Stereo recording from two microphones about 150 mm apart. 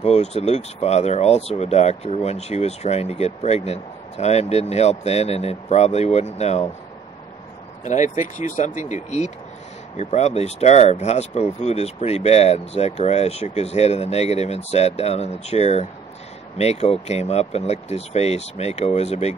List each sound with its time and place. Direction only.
0.0 s speech: 45° left (ahead or behind)
7.8 s speech: 55° left (ahead or behind)